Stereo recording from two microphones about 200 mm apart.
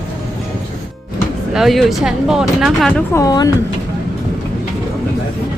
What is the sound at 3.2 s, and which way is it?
Speech, 20° left (ahead or behind).